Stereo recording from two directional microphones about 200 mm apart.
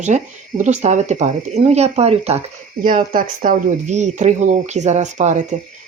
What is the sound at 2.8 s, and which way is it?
Speech, 45° right (ahead or behind).